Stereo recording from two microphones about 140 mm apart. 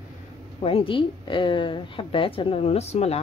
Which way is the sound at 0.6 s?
40° left (ahead or behind).